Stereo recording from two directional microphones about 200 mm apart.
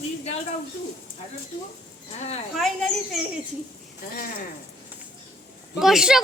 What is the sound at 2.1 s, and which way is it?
Speech, 35° left (ahead or behind).